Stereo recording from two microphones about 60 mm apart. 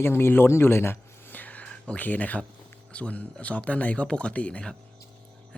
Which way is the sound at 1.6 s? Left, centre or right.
Centre.